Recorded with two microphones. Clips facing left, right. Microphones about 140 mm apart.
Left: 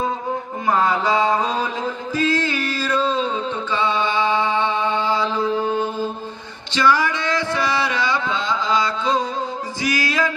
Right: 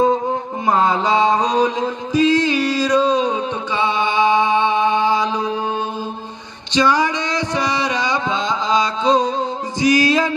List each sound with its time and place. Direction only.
0.7 s mantra: 20° right (ahead or behind)
6.7 s music: 20° right (ahead or behind)